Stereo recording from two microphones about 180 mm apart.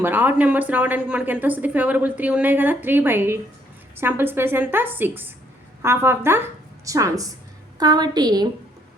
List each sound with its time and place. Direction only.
0.0 s a woman's voice: 10° right (ahead or behind)